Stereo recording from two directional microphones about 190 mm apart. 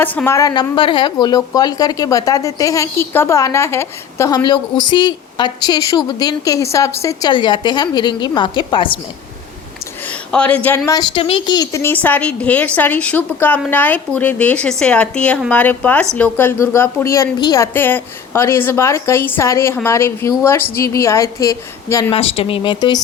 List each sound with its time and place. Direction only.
0.0 s a woman's voice: 10° left (ahead or behind); by 9.0 s 25° left (ahead or behind)
10.1 s a woman's voice: 5° left (ahead or behind)
22.1 s a woman's voice: 30° left (ahead or behind)